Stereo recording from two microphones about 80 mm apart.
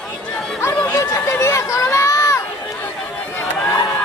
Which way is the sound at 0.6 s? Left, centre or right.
Left.